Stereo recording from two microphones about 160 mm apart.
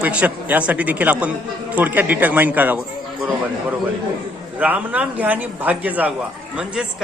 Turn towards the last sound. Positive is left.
turn(degrees=-10)  # may be behind; listen again after turning